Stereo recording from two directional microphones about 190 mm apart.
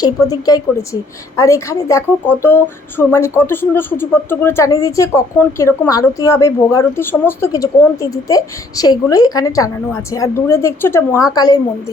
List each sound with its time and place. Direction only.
0.0 s speech: 20° left (ahead or behind)